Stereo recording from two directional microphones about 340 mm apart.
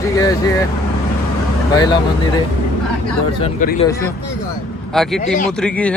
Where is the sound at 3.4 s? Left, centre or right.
Left.